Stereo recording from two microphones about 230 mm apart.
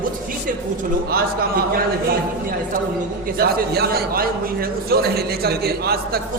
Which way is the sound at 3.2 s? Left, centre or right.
Right.